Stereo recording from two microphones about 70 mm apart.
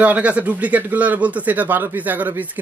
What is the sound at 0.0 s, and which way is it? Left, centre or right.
Speech, centre.